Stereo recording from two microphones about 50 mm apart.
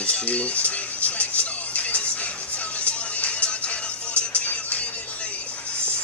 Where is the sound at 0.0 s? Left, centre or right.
Left.